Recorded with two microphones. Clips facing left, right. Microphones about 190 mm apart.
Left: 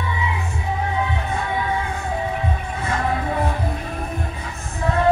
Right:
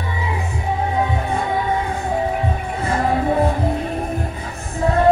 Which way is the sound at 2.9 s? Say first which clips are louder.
Right 5 dB; 35° right (ahead or behind).